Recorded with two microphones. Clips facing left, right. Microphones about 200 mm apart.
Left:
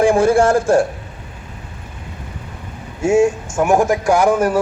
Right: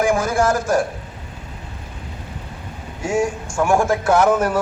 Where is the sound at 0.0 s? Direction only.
30° left (ahead or behind).